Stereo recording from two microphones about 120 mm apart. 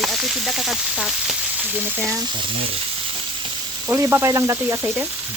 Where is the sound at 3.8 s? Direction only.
20° right (ahead or behind).